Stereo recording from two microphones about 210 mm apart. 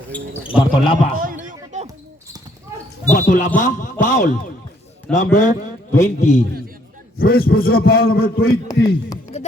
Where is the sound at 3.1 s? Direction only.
40° left (ahead or behind).